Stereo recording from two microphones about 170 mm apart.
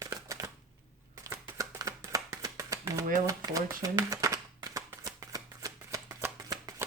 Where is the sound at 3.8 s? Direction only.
20° right (ahead or behind).